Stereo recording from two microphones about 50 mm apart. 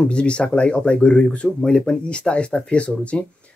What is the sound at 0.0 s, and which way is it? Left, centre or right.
Speech, left.